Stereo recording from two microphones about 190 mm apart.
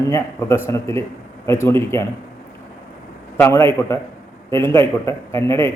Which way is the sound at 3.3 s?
10° left (ahead or behind).